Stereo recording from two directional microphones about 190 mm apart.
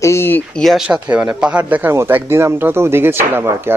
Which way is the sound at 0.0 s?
15° left (ahead or behind).